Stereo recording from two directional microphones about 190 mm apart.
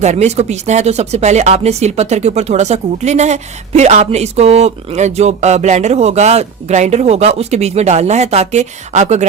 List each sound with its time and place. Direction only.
0.0 s speech: 35° right (ahead or behind)